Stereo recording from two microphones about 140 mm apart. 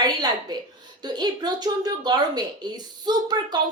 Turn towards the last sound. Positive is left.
turn(degrees=-30)  # may be behind; listen again after turning